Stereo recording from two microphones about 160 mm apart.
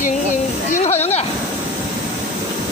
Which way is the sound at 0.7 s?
40° left (ahead or behind).